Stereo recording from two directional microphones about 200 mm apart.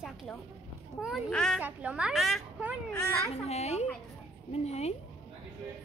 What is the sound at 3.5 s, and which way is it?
Speech, 30° left (ahead or behind).